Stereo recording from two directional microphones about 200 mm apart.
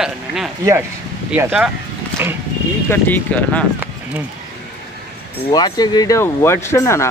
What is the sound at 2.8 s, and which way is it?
Speech, 10° left (ahead or behind).